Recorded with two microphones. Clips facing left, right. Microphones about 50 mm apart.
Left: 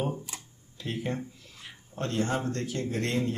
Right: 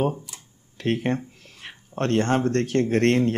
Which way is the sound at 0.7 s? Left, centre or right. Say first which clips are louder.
Right 9 dB; right.